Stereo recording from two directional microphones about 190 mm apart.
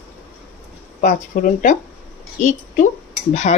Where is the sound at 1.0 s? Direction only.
45° left (ahead or behind).